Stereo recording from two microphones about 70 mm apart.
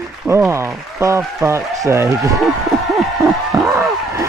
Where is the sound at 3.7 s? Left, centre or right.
Right.